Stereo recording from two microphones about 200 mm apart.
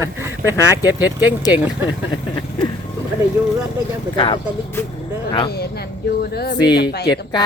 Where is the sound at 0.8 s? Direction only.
10° right (ahead or behind).